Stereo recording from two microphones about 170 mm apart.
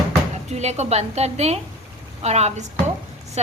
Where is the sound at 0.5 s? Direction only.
40° right (ahead or behind).